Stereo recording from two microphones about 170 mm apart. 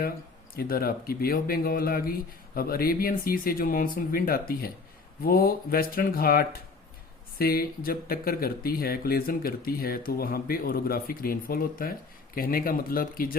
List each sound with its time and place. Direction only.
0.5 s speech: 60° left (ahead or behind)